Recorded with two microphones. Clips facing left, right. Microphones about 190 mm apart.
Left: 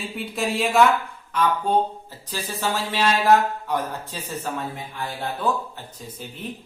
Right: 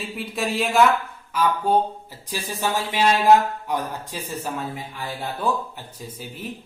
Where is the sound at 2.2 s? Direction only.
15° right (ahead or behind).